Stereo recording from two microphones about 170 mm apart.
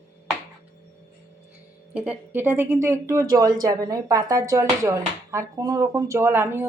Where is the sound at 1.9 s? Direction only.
10° right (ahead or behind).